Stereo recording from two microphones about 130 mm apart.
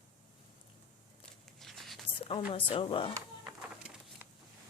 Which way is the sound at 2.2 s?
45° left (ahead or behind).